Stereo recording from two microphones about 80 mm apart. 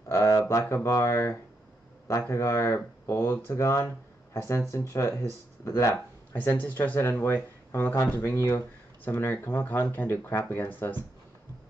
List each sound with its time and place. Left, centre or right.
0.1 s a sound: left
0.5 s speech: left
6.3 s speech: left